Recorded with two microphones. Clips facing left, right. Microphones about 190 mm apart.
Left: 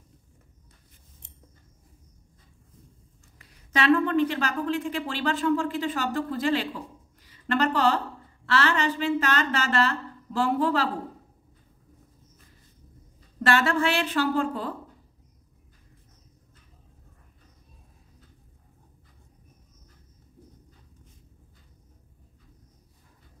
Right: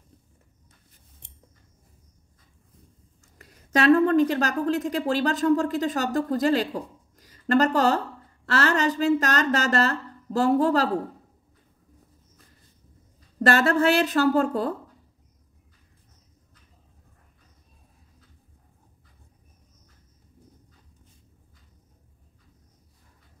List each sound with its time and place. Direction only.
3.3 s a woman's voice: 45° right (ahead or behind)
13.4 s a woman's voice: 40° right (ahead or behind)